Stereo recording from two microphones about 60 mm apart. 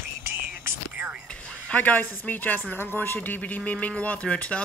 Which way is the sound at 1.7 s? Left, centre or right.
Left.